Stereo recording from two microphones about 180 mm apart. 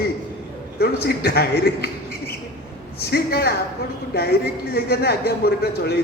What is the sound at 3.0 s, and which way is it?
A woman's voice, 60° left (ahead or behind).